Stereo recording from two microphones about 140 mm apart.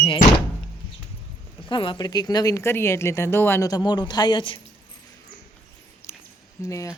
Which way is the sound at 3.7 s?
30° left (ahead or behind).